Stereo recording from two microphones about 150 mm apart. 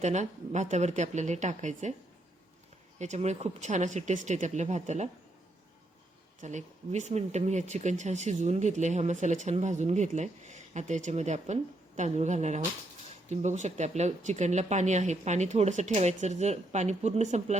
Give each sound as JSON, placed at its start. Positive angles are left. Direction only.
{"t": 0.0, "sound": "speech", "side_deg": -50}
{"t": 3.0, "sound": "speech", "side_deg": -50}
{"t": 6.4, "sound": "speech", "side_deg": -55}